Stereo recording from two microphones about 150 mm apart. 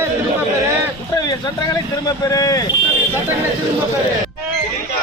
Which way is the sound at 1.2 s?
25° left (ahead or behind).